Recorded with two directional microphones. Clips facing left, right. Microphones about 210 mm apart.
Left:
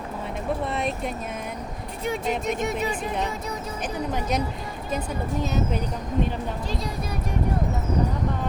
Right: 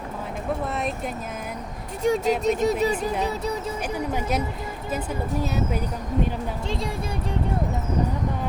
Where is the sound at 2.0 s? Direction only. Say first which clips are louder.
Right 5 dB; 40° right (ahead or behind).